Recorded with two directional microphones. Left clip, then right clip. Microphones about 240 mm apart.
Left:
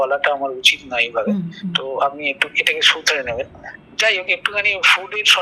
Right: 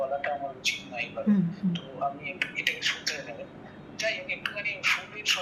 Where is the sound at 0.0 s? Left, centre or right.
Left.